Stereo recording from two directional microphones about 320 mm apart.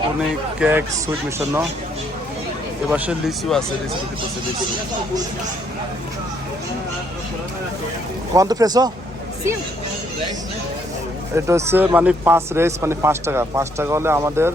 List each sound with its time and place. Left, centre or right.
0.6 s a man's voice: centre
2.9 s speech: centre
8.4 s a man's voice: centre
11.3 s a man's voice: centre